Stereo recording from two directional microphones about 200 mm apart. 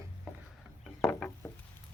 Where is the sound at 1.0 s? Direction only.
5° left (ahead or behind).